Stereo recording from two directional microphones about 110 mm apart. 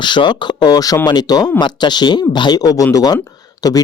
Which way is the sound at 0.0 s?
45° left (ahead or behind).